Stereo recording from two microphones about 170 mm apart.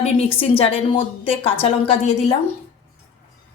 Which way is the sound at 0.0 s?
35° left (ahead or behind).